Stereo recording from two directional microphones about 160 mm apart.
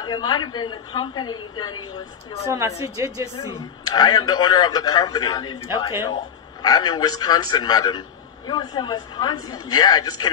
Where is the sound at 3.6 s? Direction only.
25° left (ahead or behind).